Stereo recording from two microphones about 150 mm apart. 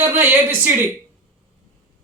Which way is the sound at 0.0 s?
10° right (ahead or behind).